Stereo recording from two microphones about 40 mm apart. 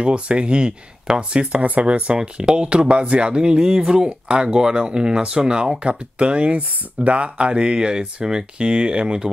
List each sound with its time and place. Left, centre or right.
0.0 s speech: right
3.5 s speech: centre